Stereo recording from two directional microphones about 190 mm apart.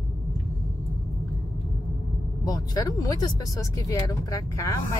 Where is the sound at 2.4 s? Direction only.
20° left (ahead or behind).